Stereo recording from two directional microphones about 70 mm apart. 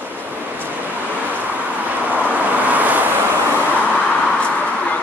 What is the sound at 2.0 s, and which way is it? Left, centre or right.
Vehicle, right.